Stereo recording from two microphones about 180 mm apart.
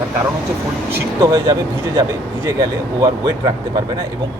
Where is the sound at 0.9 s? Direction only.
15° right (ahead or behind).